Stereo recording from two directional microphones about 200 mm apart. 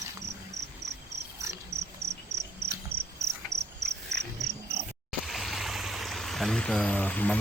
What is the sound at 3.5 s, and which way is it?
Cricket, 55° right (ahead or behind).